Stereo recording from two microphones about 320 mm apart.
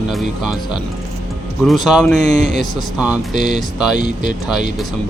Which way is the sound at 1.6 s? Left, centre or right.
Centre.